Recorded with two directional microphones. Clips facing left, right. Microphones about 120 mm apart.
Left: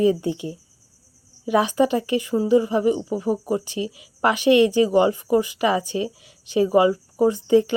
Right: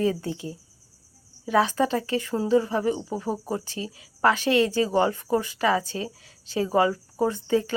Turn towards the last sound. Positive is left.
turn(degrees=15)  # may be behind; listen again after turning